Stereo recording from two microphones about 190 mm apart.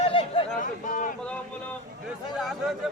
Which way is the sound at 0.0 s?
30° left (ahead or behind).